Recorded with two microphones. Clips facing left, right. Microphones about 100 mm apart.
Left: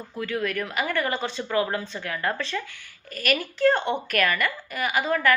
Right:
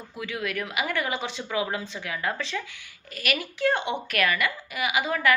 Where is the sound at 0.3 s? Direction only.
40° left (ahead or behind).